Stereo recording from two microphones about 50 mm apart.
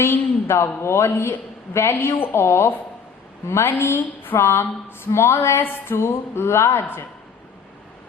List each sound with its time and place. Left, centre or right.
0.0 s a woman's voice: left
2.4 s a woman's voice: left
3.7 s a woman's voice: left
5.6 s a woman's voice: left